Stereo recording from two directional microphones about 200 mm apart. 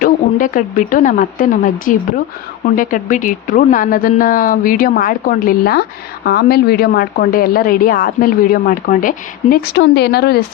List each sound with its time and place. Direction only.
0.0 s a woman's voice: 40° left (ahead or behind)
9.7 s speech: 55° left (ahead or behind)